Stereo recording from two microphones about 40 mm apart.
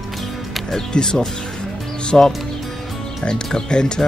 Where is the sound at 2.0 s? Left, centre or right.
Left.